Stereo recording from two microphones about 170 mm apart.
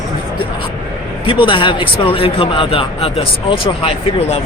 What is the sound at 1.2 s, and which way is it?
Speech, 30° left (ahead or behind).